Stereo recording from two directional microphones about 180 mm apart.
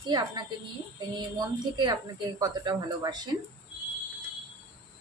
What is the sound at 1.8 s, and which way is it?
A woman's voice, 20° right (ahead or behind).